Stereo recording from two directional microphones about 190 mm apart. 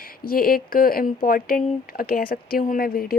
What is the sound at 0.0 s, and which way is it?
Speech, 50° left (ahead or behind).